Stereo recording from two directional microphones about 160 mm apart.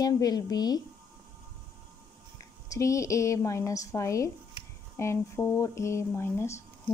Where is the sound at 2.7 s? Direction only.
20° left (ahead or behind).